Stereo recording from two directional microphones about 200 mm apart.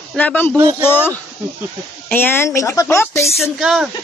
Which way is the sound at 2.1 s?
10° left (ahead or behind).